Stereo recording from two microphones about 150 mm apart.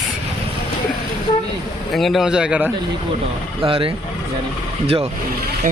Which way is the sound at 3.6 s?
35° right (ahead or behind).